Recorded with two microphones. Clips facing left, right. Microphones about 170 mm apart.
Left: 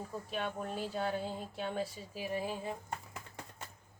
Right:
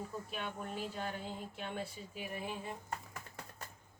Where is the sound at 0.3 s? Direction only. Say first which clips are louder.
Left 4 dB; 35° left (ahead or behind).